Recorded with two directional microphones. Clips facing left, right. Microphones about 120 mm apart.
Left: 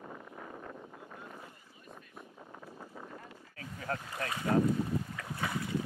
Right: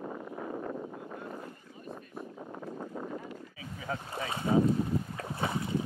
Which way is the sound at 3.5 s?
5° right (ahead or behind).